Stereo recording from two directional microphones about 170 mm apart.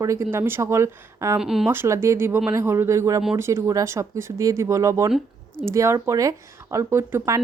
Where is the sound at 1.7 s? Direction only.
15° right (ahead or behind).